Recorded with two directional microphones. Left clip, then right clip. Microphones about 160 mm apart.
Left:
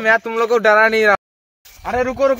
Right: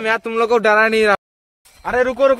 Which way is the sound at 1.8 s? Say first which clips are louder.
Right 2 dB; 10° left (ahead or behind).